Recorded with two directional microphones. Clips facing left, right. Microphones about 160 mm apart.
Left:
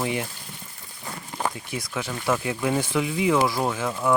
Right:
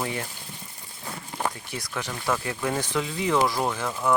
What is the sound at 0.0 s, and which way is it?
Speech, 15° left (ahead or behind).